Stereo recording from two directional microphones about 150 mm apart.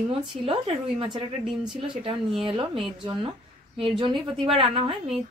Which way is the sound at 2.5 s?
35° right (ahead or behind).